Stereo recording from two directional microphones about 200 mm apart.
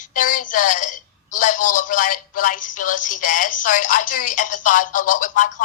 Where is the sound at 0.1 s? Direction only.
40° left (ahead or behind).